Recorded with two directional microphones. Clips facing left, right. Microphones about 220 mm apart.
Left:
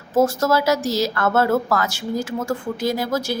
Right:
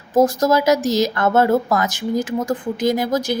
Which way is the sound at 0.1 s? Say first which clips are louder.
Right 2 dB; 15° right (ahead or behind).